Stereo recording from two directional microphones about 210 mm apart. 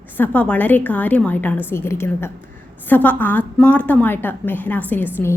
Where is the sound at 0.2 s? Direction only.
5° left (ahead or behind).